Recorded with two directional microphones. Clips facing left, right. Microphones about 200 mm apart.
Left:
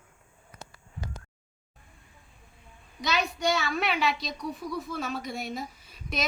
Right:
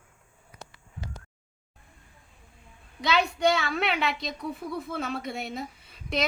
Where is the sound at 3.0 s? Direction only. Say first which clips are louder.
Right 4 dB; 60° right (ahead or behind).